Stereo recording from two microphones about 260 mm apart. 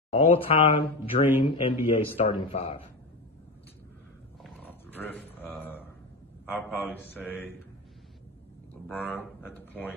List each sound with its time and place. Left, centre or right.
0.1 s speech: left
4.4 s roaring cats: centre
6.4 s a man's voice: centre
7.2 s speech: centre
8.8 s speech: centre